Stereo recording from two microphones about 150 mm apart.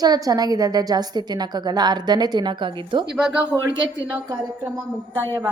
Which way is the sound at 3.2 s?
5° right (ahead or behind).